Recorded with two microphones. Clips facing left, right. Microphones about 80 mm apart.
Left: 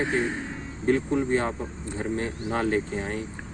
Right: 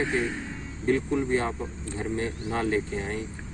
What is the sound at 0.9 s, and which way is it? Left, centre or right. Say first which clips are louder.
Speech: left 1 dB; left.